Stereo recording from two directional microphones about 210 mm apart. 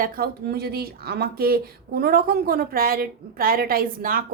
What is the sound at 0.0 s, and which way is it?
Speech, 45° right (ahead or behind).